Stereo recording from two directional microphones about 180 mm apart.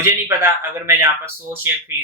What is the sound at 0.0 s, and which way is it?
Speech, 10° right (ahead or behind).